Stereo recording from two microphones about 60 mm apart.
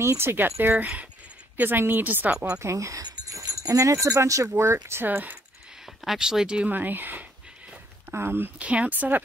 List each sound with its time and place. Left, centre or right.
0.0 s speech: right
2.6 s speech: right
4.5 s speech: right
5.0 s speech: right
5.9 s a sound: centre
6.1 s speech: centre
6.7 s speech: right
8.5 s speech: right